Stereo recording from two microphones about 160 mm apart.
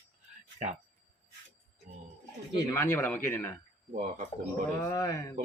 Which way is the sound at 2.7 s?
20° left (ahead or behind).